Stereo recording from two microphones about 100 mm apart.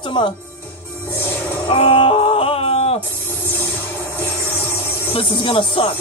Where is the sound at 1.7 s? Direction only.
65° left (ahead or behind).